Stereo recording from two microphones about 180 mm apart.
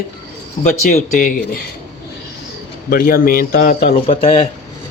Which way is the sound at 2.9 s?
55° left (ahead or behind).